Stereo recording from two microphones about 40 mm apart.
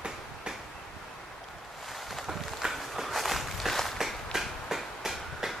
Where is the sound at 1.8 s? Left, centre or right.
Centre.